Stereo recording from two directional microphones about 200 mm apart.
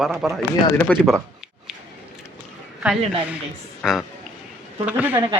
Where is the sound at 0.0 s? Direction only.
Centre (ahead or behind).